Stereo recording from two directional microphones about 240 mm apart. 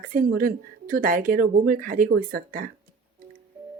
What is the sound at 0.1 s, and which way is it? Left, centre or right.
Speech, right.